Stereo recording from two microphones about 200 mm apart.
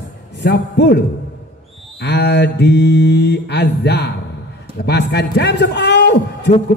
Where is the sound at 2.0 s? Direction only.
55° left (ahead or behind).